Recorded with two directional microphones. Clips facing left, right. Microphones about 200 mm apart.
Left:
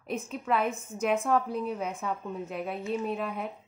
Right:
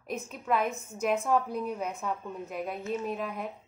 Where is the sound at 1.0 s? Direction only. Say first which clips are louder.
Left 1 dB; centre (ahead or behind).